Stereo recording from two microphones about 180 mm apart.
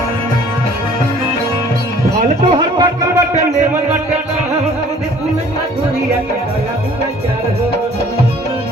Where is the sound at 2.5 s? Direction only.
30° right (ahead or behind).